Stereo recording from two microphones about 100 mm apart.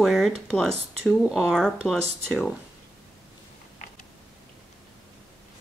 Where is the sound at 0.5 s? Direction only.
5° left (ahead or behind).